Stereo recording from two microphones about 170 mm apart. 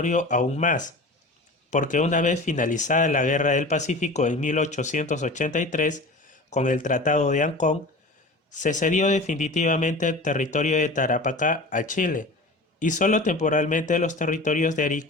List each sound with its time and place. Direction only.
0.0 s a man's voice: 45° left (ahead or behind)